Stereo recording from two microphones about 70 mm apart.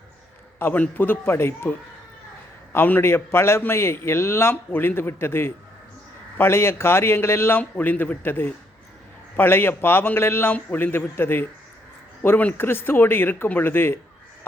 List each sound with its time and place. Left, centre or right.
0.6 s a man's voice: left
2.7 s a man's voice: left